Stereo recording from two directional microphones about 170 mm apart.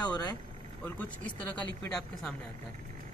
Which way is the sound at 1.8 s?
5° left (ahead or behind).